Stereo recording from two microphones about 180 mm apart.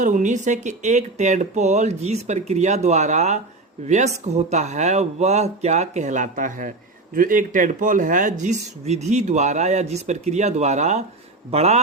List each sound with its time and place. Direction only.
0.0 s speech: 45° right (ahead or behind)